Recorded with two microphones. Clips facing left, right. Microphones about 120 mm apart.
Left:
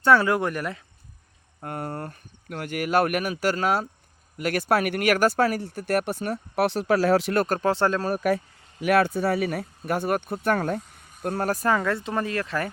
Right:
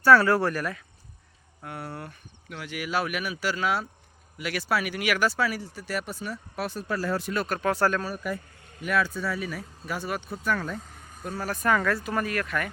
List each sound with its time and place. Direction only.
0.0 s speech: 20° left (ahead or behind)
1.6 s speech: 45° left (ahead or behind); by 7.3 s 90° left
7.3 s speech: 40° left (ahead or behind)
7.7 s speech: 25° left (ahead or behind)
8.1 s speech: 70° left (ahead or behind)
11.4 s speech: 30° left (ahead or behind)